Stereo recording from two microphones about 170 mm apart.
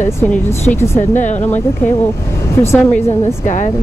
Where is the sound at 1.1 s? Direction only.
45° left (ahead or behind).